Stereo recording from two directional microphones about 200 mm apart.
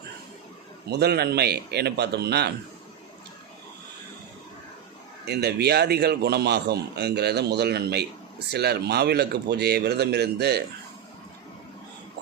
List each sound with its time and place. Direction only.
0.9 s speech: 55° right (ahead or behind)
5.2 s a man's voice: 55° right (ahead or behind)